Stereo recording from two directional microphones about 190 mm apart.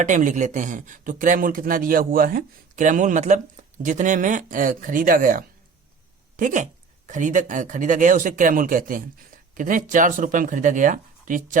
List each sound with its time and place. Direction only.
0.0 s speech: 40° right (ahead or behind)